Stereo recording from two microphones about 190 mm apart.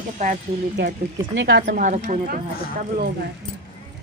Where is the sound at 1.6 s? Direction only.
45° right (ahead or behind).